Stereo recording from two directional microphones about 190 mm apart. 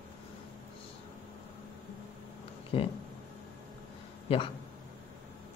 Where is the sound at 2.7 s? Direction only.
30° left (ahead or behind).